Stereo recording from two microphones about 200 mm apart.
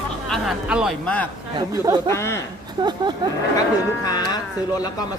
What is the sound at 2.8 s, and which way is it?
Speech, 20° right (ahead or behind).